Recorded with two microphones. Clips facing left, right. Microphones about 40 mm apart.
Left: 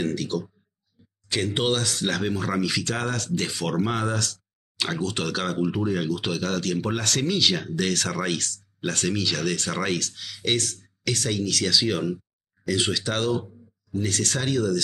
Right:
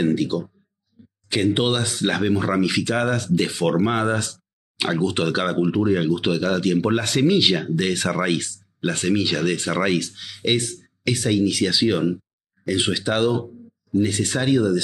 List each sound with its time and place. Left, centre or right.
0.0 s speech: centre
1.0 s a sound: centre
1.3 s speech: centre